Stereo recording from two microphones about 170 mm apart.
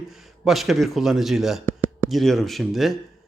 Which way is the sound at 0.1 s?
Centre (ahead or behind).